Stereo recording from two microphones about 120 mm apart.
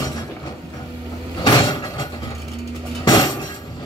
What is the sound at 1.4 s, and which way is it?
Vehicle, 40° left (ahead or behind).